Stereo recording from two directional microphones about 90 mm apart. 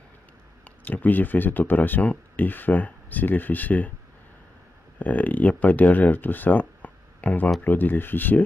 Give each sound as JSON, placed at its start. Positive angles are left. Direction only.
{"t": 0.8, "sound": "speech", "side_deg": 20}
{"t": 4.9, "sound": "speech", "side_deg": 15}